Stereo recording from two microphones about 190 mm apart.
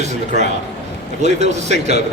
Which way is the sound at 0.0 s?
35° right (ahead or behind).